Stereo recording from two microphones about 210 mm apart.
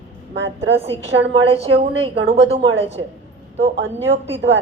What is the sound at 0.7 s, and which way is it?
A woman's voice, 30° right (ahead or behind).